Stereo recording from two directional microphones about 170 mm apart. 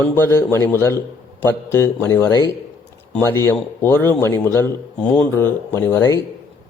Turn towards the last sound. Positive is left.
turn(degrees=15)  # may be behind; listen again after turning